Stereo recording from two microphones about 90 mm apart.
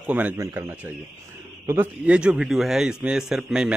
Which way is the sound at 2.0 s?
10° right (ahead or behind).